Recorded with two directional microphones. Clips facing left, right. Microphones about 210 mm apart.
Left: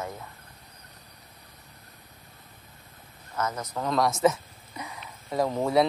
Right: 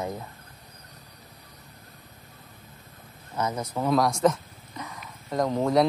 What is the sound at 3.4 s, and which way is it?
Speech, 10° right (ahead or behind).